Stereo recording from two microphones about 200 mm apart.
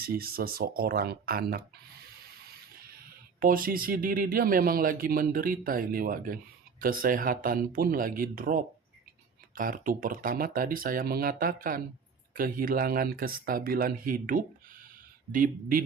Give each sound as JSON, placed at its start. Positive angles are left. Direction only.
{"t": 0.0, "sound": "speech", "side_deg": -50}
{"t": 3.4, "sound": "speech", "side_deg": -45}